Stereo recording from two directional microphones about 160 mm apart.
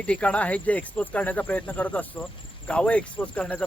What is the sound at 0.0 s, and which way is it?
Speech, 5° left (ahead or behind).